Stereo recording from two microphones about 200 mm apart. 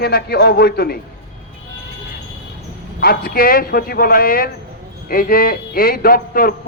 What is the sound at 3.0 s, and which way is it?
A man's voice, 50° left (ahead or behind).